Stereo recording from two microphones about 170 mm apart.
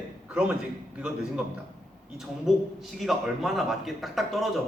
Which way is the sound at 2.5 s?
Centre (ahead or behind).